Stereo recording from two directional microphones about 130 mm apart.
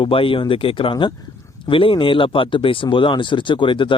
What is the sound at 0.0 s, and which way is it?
Speech, 45° left (ahead or behind).